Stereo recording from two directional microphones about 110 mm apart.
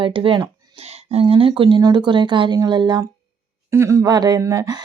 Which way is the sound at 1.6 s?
40° right (ahead or behind).